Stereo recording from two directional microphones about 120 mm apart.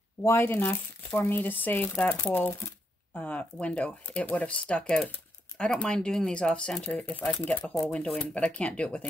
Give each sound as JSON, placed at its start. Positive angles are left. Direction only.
{"t": 0.2, "sound": "speech", "side_deg": 20}